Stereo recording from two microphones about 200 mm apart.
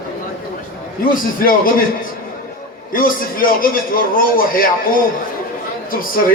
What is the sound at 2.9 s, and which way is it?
A man's voice, 45° left (ahead or behind).